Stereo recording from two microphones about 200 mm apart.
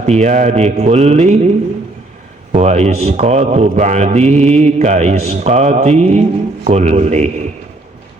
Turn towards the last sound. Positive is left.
turn(degrees=-35)  # may be behind; listen again after turning